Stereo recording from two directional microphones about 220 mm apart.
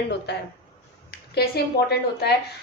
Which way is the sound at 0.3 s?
50° left (ahead or behind).